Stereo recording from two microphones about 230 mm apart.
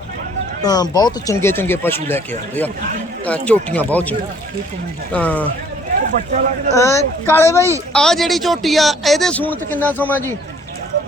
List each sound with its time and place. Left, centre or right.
0.6 s speech: centre
5.1 s speech: centre
6.1 s speech: right
6.7 s a man's voice: centre